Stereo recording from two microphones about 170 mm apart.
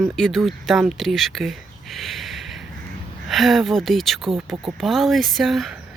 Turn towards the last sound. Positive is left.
turn(degrees=0)  # may be behind; listen again after turning